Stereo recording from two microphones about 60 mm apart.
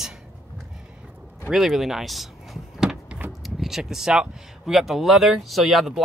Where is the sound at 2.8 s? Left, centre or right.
Centre.